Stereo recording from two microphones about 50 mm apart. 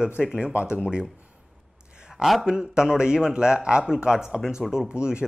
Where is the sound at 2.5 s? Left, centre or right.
Centre.